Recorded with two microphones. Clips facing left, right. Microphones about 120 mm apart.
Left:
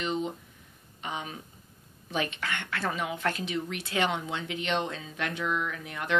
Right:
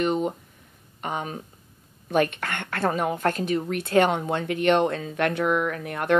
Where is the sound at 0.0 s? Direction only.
50° right (ahead or behind).